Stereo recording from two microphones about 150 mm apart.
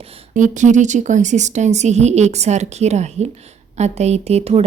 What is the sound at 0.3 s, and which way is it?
A woman's voice, 55° right (ahead or behind).